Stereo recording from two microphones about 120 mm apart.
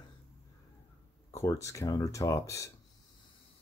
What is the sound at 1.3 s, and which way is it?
Speech, 25° left (ahead or behind).